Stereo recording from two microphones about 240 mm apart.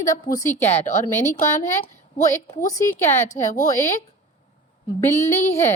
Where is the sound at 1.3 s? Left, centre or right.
Left.